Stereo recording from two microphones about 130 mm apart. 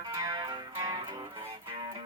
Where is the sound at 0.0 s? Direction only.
30° right (ahead or behind).